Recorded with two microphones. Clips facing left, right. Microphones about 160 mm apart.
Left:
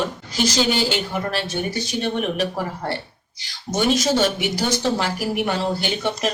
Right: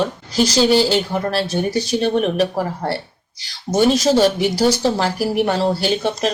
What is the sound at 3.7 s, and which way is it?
Speech, 35° right (ahead or behind).